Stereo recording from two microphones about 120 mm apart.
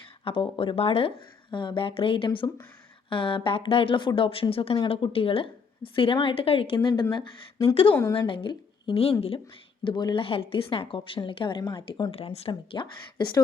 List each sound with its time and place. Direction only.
0.3 s speech: 50° left (ahead or behind)
7.9 s a woman's voice: 25° left (ahead or behind)
8.3 s a woman's voice: 45° left (ahead or behind)
12.1 s speech: 55° left (ahead or behind)
12.5 s speech: 40° left (ahead or behind)